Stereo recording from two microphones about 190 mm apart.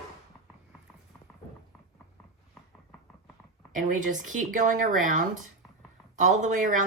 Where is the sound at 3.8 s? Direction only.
45° right (ahead or behind).